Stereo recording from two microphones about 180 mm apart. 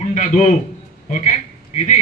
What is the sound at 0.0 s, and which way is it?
Speech, 40° left (ahead or behind).